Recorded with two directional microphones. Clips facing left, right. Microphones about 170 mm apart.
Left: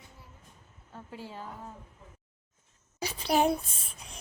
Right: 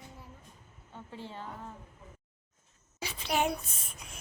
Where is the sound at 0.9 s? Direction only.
10° left (ahead or behind).